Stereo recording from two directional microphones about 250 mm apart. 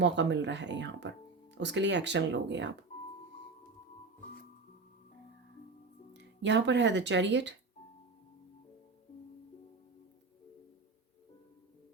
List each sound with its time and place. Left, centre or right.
0.0 s speech: right
6.4 s speech: right